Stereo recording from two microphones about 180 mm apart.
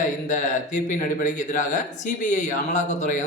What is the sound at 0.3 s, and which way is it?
Speech, 45° left (ahead or behind).